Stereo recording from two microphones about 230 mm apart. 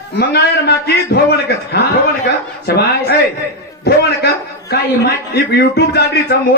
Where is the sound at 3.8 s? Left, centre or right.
Left.